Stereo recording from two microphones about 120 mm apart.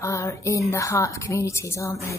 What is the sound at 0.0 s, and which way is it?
Speech, 25° left (ahead or behind).